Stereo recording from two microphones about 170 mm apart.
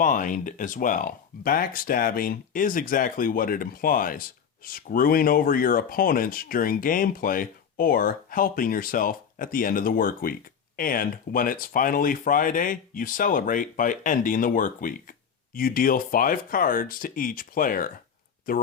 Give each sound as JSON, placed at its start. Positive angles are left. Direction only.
{"t": 0.0, "sound": "speech", "side_deg": 50}